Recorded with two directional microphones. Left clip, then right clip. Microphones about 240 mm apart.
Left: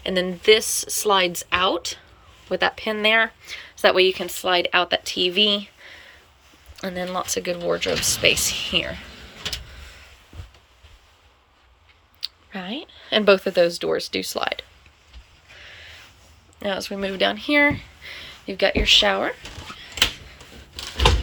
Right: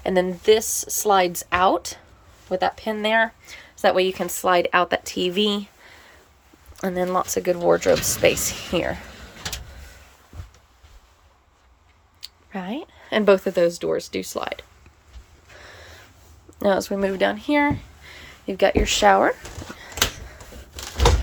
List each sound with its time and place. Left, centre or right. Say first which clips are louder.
0.0 s speech: right 1 dB; centre
12.2 s speech: left 2 dB; centre
15.6 s snort: left 2 dB; right
16.6 s speech: right 6 dB; right